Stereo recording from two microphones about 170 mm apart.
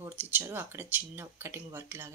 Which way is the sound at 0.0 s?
10° right (ahead or behind).